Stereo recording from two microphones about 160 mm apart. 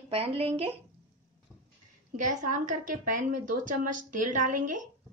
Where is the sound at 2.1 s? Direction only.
55° right (ahead or behind).